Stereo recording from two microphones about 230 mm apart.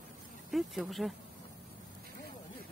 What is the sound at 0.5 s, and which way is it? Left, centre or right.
Speech, centre.